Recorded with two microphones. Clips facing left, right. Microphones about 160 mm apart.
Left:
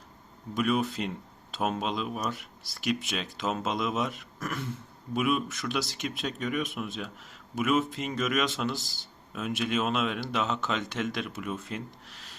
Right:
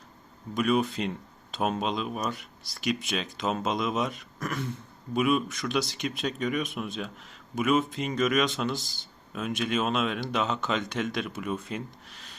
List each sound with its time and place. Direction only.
0.5 s speech: centre (ahead or behind)